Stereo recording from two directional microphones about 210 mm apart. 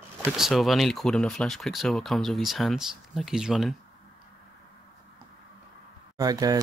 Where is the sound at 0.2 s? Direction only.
Centre (ahead or behind).